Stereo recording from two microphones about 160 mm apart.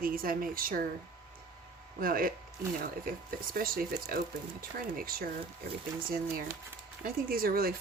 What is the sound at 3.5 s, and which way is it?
Speech, 65° right (ahead or behind).